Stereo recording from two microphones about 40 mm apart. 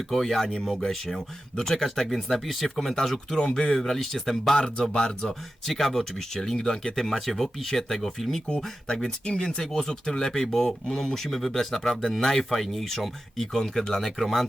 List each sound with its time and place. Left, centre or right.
0.1 s speech: centre
0.4 s speech: centre
3.3 s speech: centre
5.6 s speech: centre
7.0 s speech: centre
9.0 s speech: centre